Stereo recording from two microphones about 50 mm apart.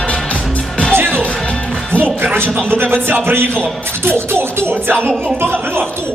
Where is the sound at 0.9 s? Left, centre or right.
Right.